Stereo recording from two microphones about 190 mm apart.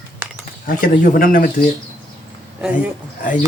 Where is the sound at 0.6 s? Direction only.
45° left (ahead or behind).